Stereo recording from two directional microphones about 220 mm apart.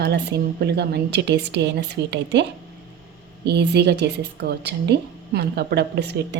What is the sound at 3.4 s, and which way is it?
A woman's voice, 50° right (ahead or behind).